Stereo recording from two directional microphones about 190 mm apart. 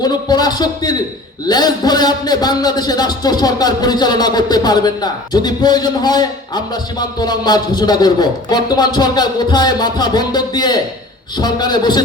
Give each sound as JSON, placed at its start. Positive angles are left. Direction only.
{"t": 0.0, "sound": "a man's voice", "side_deg": 20}